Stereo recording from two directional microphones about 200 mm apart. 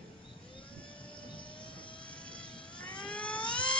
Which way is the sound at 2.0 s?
5° left (ahead or behind).